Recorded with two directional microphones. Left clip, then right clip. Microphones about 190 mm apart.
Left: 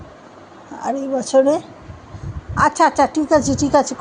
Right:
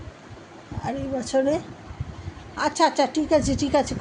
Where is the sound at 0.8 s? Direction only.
25° left (ahead or behind).